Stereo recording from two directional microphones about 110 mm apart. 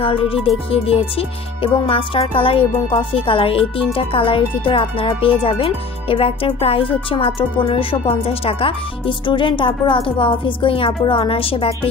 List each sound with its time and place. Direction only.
0.0 s speech: 55° left (ahead or behind)